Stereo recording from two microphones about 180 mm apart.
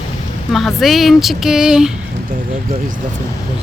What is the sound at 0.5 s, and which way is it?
Speech, centre (ahead or behind).